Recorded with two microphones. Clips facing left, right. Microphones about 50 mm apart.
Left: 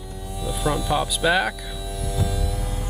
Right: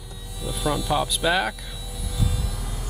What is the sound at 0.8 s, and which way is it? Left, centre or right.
Speech, centre.